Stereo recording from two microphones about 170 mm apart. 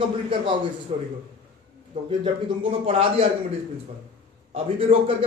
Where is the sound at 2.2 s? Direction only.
35° right (ahead or behind).